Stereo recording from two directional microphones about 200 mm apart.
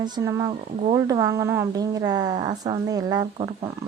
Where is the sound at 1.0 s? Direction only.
15° right (ahead or behind).